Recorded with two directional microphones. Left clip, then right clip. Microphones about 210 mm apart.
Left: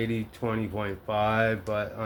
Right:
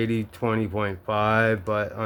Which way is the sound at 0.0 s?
50° right (ahead or behind).